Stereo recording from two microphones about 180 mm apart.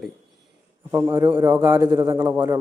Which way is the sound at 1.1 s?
20° right (ahead or behind).